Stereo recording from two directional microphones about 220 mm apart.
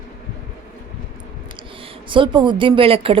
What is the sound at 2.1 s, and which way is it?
A woman's voice, 20° right (ahead or behind).